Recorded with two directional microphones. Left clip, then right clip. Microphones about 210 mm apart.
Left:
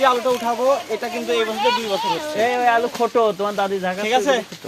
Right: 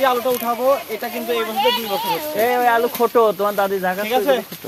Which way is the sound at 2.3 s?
10° right (ahead or behind).